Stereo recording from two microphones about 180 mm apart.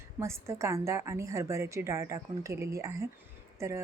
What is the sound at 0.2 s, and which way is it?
A woman's voice, 15° right (ahead or behind).